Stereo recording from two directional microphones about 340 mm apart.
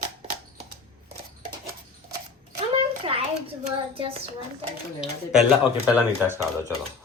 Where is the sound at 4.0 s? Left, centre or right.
Centre.